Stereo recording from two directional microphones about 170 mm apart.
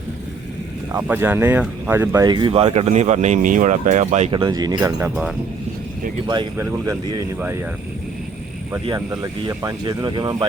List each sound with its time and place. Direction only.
0.9 s speech: 10° right (ahead or behind); by 4.3 s 45° right (ahead or behind)
4.3 s speech: 25° right (ahead or behind)
4.8 s speech: 10° right (ahead or behind)
6.2 s speech: 25° right (ahead or behind)
9.0 s speech: 15° right (ahead or behind)